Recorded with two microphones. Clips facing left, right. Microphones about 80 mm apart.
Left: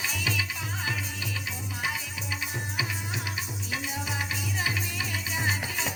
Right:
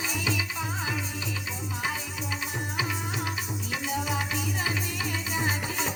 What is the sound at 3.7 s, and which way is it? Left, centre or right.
Music, right.